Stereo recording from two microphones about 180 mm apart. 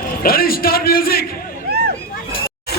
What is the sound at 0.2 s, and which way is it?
A man's voice, 55° left (ahead or behind).